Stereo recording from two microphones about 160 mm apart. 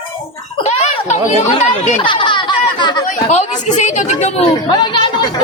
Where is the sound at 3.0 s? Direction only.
50° left (ahead or behind).